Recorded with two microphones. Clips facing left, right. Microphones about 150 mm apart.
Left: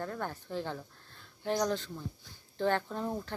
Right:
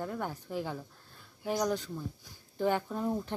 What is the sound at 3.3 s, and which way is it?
Speech, 20° right (ahead or behind).